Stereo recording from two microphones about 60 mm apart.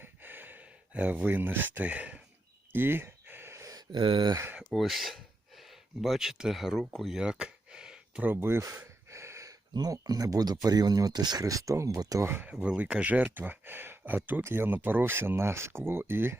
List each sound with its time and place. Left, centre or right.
0.0 s a sound: right
1.2 s speech: right
2.7 s a sound: right
3.9 s speech: centre
7.1 s a sound: centre
8.2 s speech: right
9.0 s gasp: right
9.5 s speech: right
12.2 s speech: right
12.6 s speech: centre; by 16.4 s right